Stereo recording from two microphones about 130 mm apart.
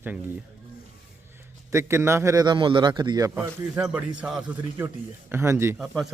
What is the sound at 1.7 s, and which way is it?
A man's voice, 20° right (ahead or behind).